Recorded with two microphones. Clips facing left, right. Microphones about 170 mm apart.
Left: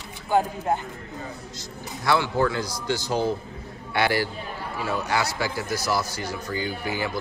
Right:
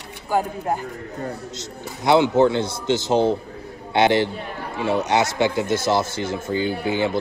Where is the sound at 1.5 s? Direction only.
20° right (ahead or behind).